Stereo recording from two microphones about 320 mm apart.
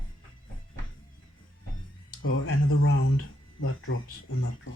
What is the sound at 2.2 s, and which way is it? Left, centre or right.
Speech, left.